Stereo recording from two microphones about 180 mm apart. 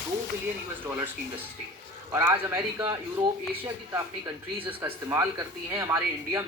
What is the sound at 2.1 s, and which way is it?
Speech, 15° right (ahead or behind).